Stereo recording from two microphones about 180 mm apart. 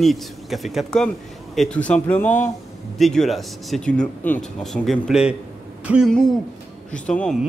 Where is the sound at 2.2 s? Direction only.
45° left (ahead or behind).